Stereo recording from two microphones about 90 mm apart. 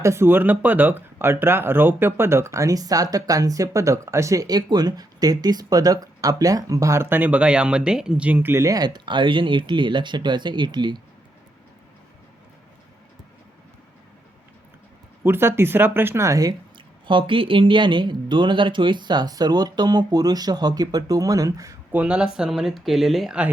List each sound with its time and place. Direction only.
0.0 s speech: 30° right (ahead or behind)
8.6 s speech: 45° right (ahead or behind)
15.2 s speech: 25° right (ahead or behind)
16.7 s speech: 65° right (ahead or behind); by 21.8 s 40° right (ahead or behind)
21.9 s speech: 10° right (ahead or behind)